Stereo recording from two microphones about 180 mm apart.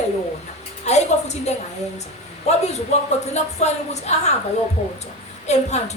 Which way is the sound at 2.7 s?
40° left (ahead or behind).